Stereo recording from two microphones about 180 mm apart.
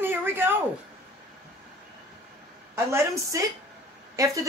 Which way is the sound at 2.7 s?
15° right (ahead or behind).